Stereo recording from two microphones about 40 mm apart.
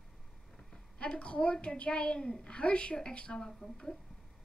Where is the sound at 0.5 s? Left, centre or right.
Left.